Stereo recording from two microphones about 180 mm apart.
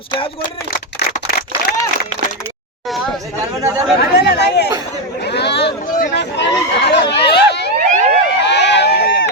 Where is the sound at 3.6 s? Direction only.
15° right (ahead or behind).